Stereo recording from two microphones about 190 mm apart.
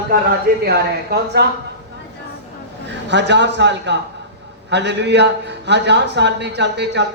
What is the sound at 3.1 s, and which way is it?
A man's voice, 65° right (ahead or behind).